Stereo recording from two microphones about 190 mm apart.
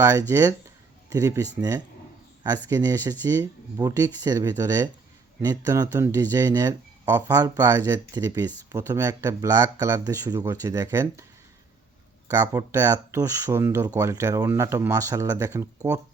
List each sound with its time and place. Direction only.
0.0 s speech: 15° right (ahead or behind)
2.6 s speech: 20° right (ahead or behind)
12.3 s speech: 20° right (ahead or behind)